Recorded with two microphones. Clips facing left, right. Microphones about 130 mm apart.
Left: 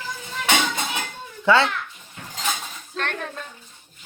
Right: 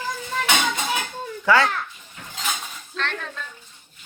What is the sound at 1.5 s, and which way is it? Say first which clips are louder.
Speech: left 1 dB; 25° left (ahead or behind).